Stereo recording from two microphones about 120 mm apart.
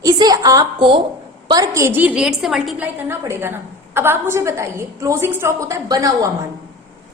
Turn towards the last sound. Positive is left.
turn(degrees=-30)  # may be behind; listen again after turning